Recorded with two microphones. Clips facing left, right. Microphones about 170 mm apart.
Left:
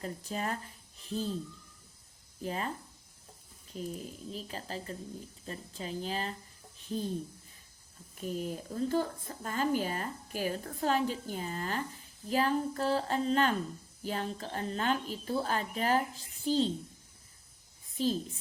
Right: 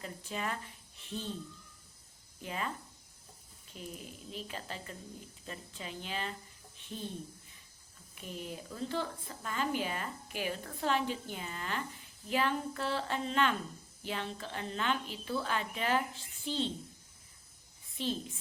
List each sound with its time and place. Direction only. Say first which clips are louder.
0.0 s speech: left 3 dB; 40° left (ahead or behind)
2.4 s speech: left 3 dB; 35° left (ahead or behind)
3.7 s speech: left 6 dB; 35° left (ahead or behind)
8.1 s speech: left 7 dB; 40° left (ahead or behind)
17.9 s a woman's voice: left 5 dB; 40° left (ahead or behind)